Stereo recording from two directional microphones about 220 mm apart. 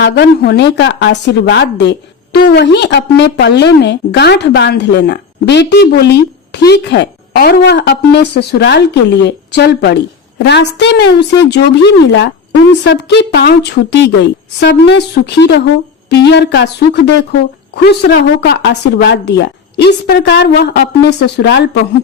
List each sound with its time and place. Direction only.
0.0 s a woman's voice: 50° left (ahead or behind)
12.8 s a woman's voice: 50° left (ahead or behind)